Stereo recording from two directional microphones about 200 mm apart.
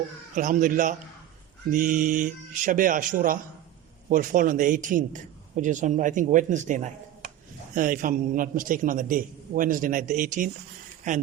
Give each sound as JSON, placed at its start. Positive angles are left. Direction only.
{"t": 0.3, "sound": "a man's voice", "side_deg": -40}